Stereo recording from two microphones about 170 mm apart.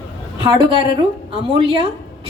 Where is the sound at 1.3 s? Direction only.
30° right (ahead or behind).